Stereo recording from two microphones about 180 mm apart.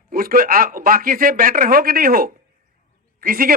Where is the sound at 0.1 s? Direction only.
50° right (ahead or behind).